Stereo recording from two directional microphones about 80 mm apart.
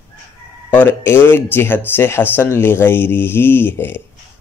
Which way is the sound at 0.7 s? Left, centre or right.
Left.